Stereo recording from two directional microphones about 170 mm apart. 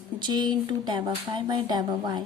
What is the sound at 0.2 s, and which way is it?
A woman's voice, 25° right (ahead or behind).